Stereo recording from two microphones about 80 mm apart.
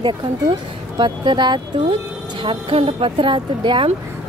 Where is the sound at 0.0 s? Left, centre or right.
Right.